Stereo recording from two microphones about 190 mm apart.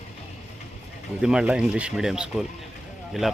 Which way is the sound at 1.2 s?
5° right (ahead or behind).